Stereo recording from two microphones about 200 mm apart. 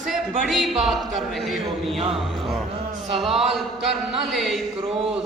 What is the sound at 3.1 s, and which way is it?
Speech, centre (ahead or behind).